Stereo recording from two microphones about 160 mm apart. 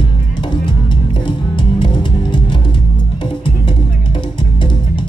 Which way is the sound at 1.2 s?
30° left (ahead or behind).